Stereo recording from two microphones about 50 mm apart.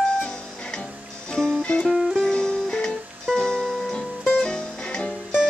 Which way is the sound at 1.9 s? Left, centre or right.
Centre.